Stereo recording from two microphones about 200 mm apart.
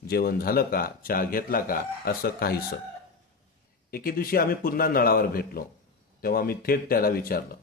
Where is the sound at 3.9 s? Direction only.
45° left (ahead or behind).